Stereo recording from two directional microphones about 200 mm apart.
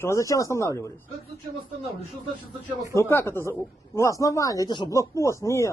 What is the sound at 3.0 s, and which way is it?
Speech, 15° left (ahead or behind).